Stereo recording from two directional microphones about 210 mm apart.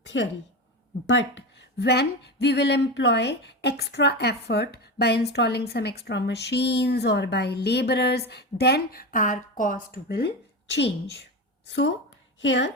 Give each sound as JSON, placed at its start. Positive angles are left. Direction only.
{"t": 0.1, "sound": "a woman's voice", "side_deg": 65}